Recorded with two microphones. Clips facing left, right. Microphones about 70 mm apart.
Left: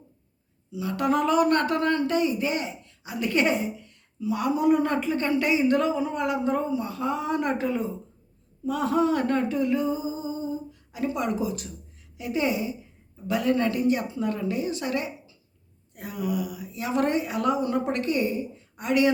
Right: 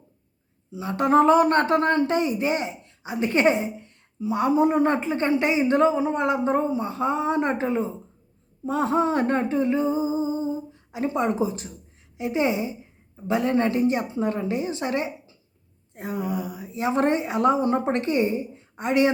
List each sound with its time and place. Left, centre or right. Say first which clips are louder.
0.7 s speech: right 4 dB; right
8.6 s a sound: right 1 dB; right
12.1 s speech: right 3 dB; right